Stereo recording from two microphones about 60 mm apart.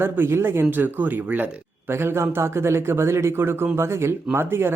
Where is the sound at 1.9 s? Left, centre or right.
Right.